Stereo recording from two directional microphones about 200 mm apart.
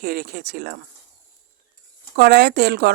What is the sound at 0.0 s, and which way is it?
Speech, 50° right (ahead or behind).